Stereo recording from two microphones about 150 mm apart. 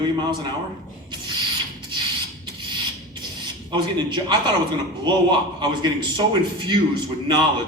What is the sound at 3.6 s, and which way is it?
A man's voice, 30° right (ahead or behind).